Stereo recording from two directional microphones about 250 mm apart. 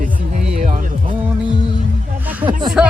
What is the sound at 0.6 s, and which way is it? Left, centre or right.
Music, right.